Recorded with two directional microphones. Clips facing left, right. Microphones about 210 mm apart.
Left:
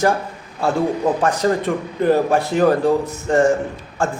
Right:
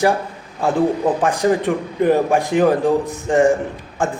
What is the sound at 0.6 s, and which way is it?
A man's voice, 15° right (ahead or behind).